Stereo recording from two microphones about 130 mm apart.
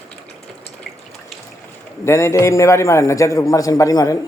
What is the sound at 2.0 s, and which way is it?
A man's voice, 20° left (ahead or behind).